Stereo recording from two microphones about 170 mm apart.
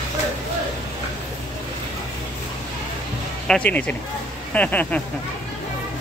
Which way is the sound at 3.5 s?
10° left (ahead or behind).